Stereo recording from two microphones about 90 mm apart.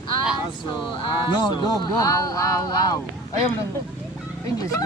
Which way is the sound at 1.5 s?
50° left (ahead or behind).